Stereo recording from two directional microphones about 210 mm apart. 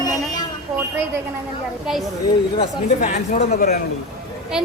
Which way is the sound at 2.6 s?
35° left (ahead or behind).